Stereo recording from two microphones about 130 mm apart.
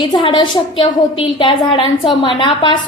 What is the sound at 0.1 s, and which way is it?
A woman's voice, 35° left (ahead or behind).